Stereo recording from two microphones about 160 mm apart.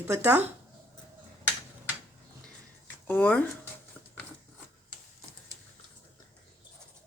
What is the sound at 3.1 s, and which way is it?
Speech, 10° left (ahead or behind).